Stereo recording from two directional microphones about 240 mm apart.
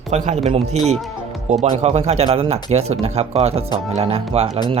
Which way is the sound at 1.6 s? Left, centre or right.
Right.